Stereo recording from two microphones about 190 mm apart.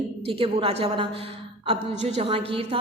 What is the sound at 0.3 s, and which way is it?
A woman's voice, 30° right (ahead or behind).